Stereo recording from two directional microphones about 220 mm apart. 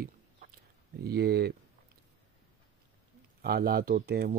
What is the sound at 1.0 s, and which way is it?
Speech, 45° right (ahead or behind).